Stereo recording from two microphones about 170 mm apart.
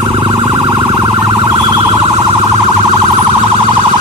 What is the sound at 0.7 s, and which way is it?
Emergency vehicle, 20° right (ahead or behind).